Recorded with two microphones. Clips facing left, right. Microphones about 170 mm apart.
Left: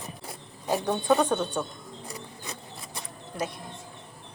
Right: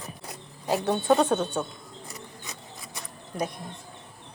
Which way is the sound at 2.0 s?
30° left (ahead or behind).